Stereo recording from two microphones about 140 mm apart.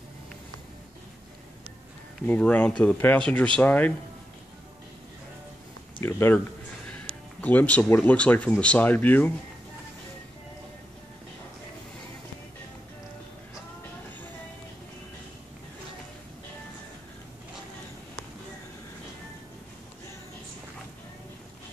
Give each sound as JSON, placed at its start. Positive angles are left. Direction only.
{"t": 2.2, "sound": "speech", "side_deg": 10}
{"t": 5.9, "sound": "speech", "side_deg": 20}